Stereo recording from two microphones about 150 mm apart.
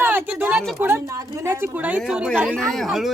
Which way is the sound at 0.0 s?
15° right (ahead or behind).